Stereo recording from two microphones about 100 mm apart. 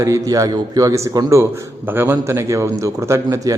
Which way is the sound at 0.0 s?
30° right (ahead or behind).